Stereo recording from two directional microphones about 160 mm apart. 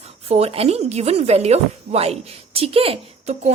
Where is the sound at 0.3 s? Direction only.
40° right (ahead or behind).